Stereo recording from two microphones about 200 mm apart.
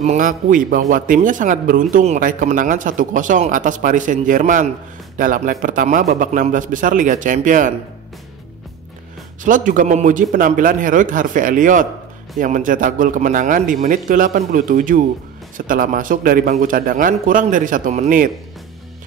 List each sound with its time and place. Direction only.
0.0 s a man's voice: 35° right (ahead or behind)
9.4 s a man's voice: 40° right (ahead or behind)